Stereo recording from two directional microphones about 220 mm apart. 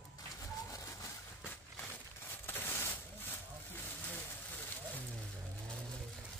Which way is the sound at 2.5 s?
10° left (ahead or behind).